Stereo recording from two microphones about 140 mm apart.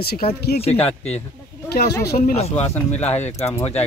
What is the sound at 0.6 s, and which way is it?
Speech, 45° left (ahead or behind).